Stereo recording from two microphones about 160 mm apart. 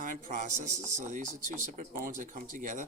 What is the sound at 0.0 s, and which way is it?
A man's voice, 55° right (ahead or behind).